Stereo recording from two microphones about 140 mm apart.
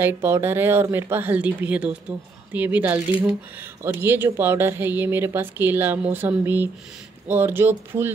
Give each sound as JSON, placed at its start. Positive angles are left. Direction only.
{"t": 0.0, "sound": "speech", "side_deg": -15}